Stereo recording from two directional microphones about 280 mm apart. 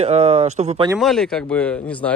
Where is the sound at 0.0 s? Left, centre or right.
Right.